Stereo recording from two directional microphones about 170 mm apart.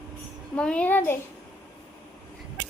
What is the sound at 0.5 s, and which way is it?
Speech, 5° left (ahead or behind).